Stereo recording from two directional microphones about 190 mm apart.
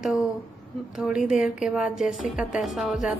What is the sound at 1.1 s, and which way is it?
Music, 5° right (ahead or behind).